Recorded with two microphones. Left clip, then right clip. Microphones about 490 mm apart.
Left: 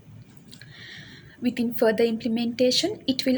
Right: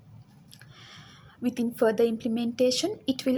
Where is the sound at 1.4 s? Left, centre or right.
Right.